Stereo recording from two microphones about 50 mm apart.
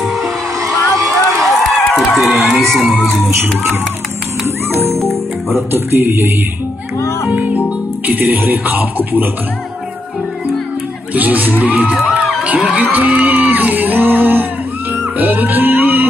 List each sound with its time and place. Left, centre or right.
0.6 s a sound: centre
2.4 s speech: centre
3.1 s speech: centre
5.0 s speech: right
7.2 s speech: right
11.1 s speech: right
15.1 s a sound: right